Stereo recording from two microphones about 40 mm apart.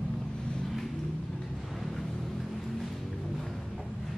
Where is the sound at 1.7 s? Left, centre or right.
Centre.